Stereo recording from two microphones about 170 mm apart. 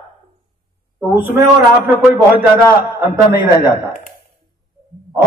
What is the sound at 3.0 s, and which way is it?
Speech, 25° left (ahead or behind).